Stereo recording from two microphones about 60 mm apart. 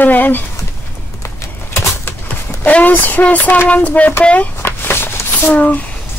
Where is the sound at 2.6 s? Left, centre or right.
Left.